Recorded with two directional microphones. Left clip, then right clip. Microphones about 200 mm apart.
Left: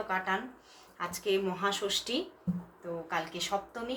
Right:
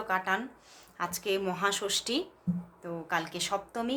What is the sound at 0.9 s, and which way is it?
Speech, 35° right (ahead or behind).